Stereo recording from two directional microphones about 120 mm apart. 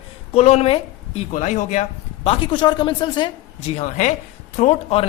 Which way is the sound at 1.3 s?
90° left.